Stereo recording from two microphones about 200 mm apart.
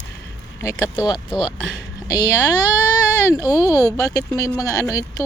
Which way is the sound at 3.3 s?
20° left (ahead or behind).